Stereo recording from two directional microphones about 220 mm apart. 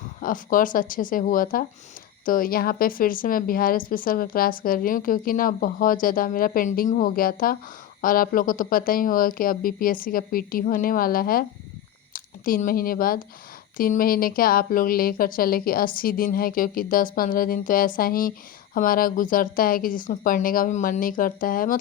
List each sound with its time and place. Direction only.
0.2 s a woman's voice: 40° left (ahead or behind)